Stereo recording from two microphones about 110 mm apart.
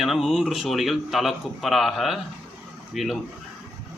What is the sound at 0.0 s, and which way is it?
A man's voice, centre (ahead or behind).